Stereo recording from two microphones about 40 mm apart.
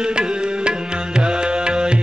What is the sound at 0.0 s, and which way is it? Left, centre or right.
Music, right.